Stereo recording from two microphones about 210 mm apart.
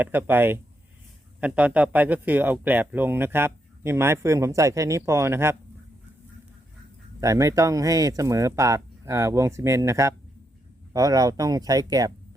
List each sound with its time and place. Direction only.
0.0 s speech: 10° right (ahead or behind)
7.2 s speech: 15° right (ahead or behind)